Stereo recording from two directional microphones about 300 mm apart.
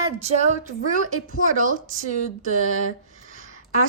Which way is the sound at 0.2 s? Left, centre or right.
Right.